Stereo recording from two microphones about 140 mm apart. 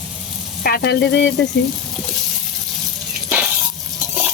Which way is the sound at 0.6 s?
90° left.